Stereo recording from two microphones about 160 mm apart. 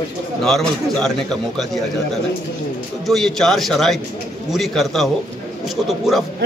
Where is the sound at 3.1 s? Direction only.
Centre (ahead or behind).